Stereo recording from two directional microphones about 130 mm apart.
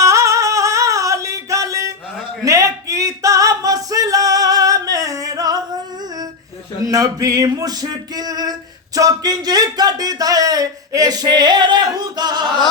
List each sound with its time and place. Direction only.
0.0 s music: 25° right (ahead or behind)
2.4 s singing: 25° right (ahead or behind)
6.8 s a sound: 25° right (ahead or behind)
9.0 s speech: 30° right (ahead or behind)